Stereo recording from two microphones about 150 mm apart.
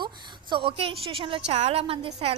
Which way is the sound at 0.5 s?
35° right (ahead or behind).